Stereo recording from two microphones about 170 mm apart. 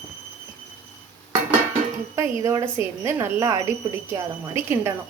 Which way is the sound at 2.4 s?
15° right (ahead or behind).